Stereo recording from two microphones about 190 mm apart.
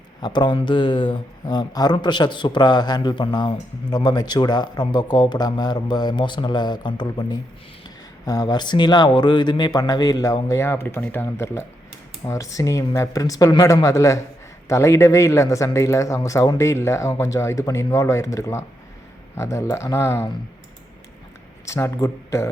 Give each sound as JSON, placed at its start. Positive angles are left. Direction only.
{"t": 0.2, "sound": "speech", "side_deg": 20}
{"t": 21.7, "sound": "speech", "side_deg": 15}